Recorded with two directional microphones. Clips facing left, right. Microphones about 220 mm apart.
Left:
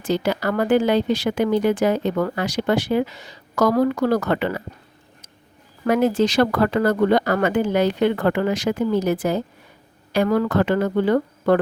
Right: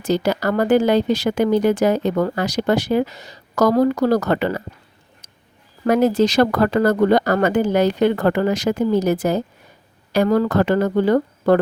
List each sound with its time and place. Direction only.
0.0 s speech: 40° right (ahead or behind)
5.8 s speech: 40° right (ahead or behind)